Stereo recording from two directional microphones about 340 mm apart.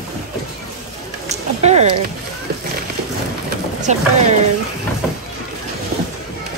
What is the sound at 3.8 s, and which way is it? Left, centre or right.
Speech, centre.